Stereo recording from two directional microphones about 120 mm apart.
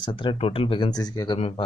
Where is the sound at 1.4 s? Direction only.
55° left (ahead or behind).